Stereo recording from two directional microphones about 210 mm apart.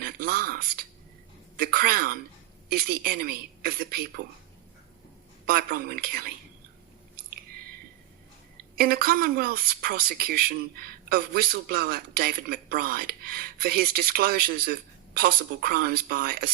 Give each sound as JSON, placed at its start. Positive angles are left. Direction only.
{"t": 0.0, "sound": "a woman's voice", "side_deg": -45}
{"t": 5.5, "sound": "a woman's voice", "side_deg": -45}
{"t": 8.7, "sound": "a woman's voice", "side_deg": -45}